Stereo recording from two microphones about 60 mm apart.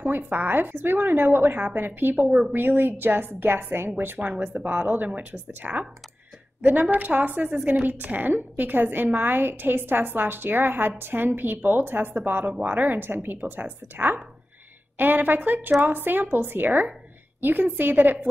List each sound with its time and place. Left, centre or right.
0.0 s a woman's voice: right
4.2 s a woman's voice: right